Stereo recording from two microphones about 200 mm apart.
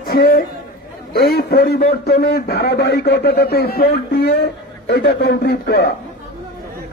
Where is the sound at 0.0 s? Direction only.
45° left (ahead or behind).